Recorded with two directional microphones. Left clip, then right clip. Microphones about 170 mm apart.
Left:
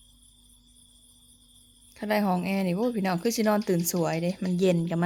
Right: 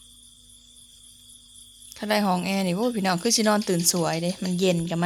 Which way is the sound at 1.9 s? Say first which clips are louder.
Right 3 dB; 10° left (ahead or behind).